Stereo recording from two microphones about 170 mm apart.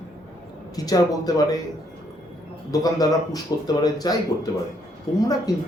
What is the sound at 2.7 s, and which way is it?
Speech, 20° left (ahead or behind).